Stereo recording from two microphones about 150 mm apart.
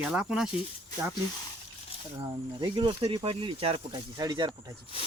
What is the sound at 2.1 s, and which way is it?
Speech, 30° right (ahead or behind).